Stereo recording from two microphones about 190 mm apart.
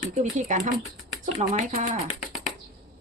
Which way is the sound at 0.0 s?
40° right (ahead or behind).